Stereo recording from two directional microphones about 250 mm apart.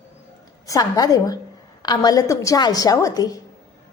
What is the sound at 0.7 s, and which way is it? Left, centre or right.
Child singing, centre.